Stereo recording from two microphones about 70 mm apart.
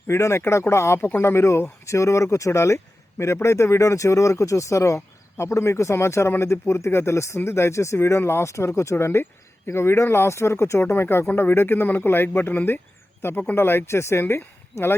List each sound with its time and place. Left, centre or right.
0.1 s speech: left